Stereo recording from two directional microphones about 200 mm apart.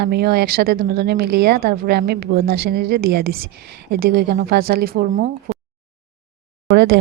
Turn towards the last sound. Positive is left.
turn(degrees=-60)  # may be behind; listen again after turning